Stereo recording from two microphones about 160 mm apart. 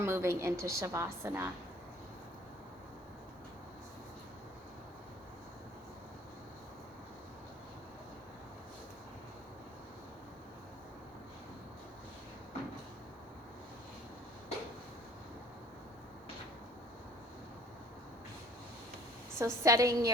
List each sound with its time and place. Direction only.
0.0 s a woman's voice: 15° right (ahead or behind)
19.4 s a woman's voice: 20° right (ahead or behind)